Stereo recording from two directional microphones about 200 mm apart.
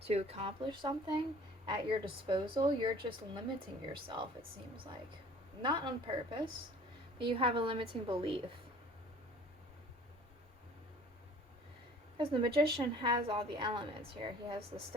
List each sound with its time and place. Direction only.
0.1 s a woman's voice: 30° right (ahead or behind)
5.6 s a woman's voice: 25° right (ahead or behind)
12.1 s a woman's voice: 25° right (ahead or behind)